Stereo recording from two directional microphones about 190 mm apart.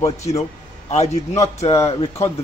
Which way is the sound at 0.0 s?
15° left (ahead or behind).